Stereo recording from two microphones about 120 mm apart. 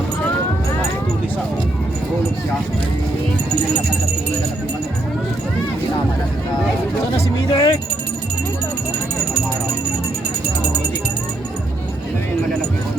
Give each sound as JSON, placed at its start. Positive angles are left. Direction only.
{"t": 7.5, "sound": "keys jangling", "side_deg": 30}